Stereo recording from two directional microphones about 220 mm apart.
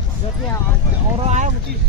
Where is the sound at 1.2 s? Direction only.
35° right (ahead or behind).